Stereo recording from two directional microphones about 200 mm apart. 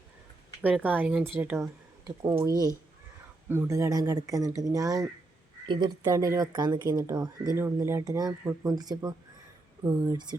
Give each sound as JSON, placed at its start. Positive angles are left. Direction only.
{"t": 0.6, "sound": "speech", "side_deg": -10}
{"t": 3.5, "sound": "speech", "side_deg": -10}